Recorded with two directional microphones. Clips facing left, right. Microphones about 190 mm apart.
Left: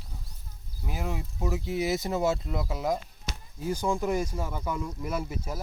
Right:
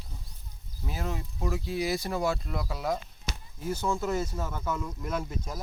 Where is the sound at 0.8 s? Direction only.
15° left (ahead or behind).